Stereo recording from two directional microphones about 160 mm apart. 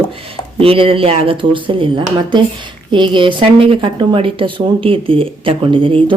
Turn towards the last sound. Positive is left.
turn(degrees=-30)  # may be behind; listen again after turning